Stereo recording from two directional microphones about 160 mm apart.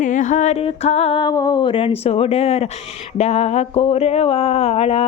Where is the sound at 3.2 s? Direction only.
40° left (ahead or behind).